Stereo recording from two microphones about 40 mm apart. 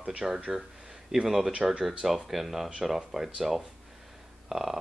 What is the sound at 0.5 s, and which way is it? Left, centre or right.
Speech, centre.